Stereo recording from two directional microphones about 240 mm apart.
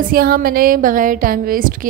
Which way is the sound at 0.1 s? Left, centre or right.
Right.